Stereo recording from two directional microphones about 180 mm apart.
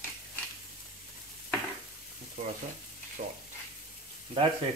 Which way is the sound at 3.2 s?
55° right (ahead or behind).